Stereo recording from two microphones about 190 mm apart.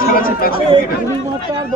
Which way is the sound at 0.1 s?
50° left (ahead or behind).